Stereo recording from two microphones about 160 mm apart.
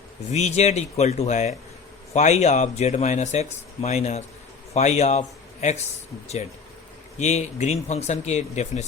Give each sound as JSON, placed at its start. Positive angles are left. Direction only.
{"t": 0.3, "sound": "a man's voice", "side_deg": 45}
{"t": 7.2, "sound": "speech", "side_deg": 45}